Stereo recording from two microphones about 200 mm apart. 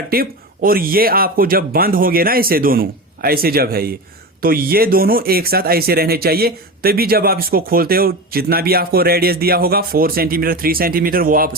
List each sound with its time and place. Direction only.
0.1 s speech: 45° right (ahead or behind)